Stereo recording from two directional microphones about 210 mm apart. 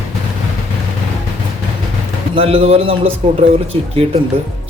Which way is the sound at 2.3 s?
25° right (ahead or behind).